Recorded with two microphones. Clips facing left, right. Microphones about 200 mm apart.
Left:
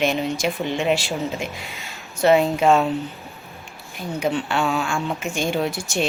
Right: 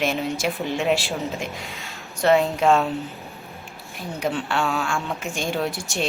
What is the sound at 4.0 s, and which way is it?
A woman's voice, centre (ahead or behind).